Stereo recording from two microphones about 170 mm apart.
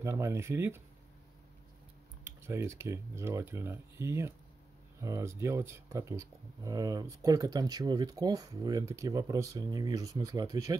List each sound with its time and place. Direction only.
0.0 s speech: 15° right (ahead or behind)
2.2 s speech: 15° right (ahead or behind)